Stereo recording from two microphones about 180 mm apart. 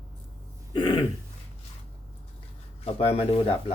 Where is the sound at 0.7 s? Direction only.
25° left (ahead or behind).